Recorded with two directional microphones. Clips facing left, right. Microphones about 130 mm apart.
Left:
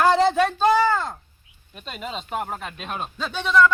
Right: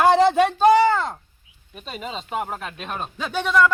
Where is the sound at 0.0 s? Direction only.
15° right (ahead or behind).